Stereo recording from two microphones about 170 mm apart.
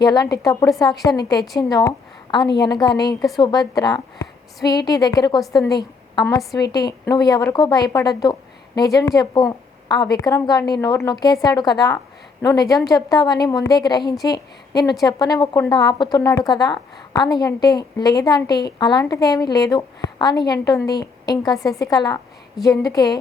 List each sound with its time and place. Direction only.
0.0 s a woman's voice: 25° left (ahead or behind)